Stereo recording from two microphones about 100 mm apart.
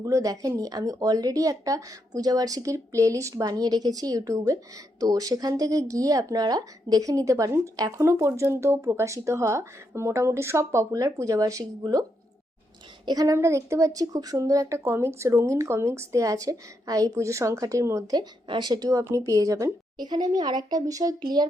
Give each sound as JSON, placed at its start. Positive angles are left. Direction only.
{"t": 0.0, "sound": "speech", "side_deg": -35}
{"t": 13.1, "sound": "speech", "side_deg": -35}
{"t": 18.9, "sound": "speech", "side_deg": -30}
{"t": 20.0, "sound": "speech", "side_deg": -45}